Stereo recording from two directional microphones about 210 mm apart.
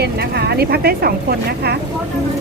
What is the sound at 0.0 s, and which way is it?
Speech, 50° right (ahead or behind).